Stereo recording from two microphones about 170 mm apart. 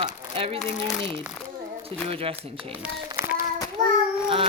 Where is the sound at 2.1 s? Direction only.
35° right (ahead or behind).